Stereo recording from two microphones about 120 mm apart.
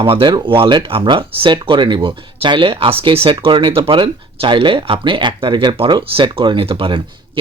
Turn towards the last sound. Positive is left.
turn(degrees=-45)  # may be behind; listen again after turning